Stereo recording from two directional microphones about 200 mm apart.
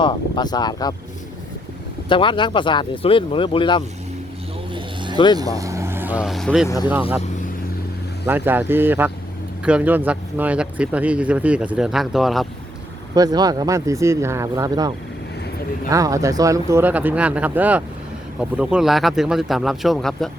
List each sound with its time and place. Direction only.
0.0 s speech: 20° left (ahead or behind)
2.0 s speech: 25° left (ahead or behind)
4.7 s vehicle: 25° right (ahead or behind)
5.1 s speech: 20° left (ahead or behind)
5.4 s speech: 15° right (ahead or behind); by 6.7 s centre (ahead or behind)
6.7 s speech: 20° left (ahead or behind)
8.3 s speech: 10° right (ahead or behind)
13.1 s speech: 20° right (ahead or behind); by 20.3 s centre (ahead or behind)